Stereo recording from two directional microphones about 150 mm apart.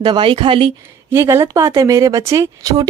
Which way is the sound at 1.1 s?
15° right (ahead or behind).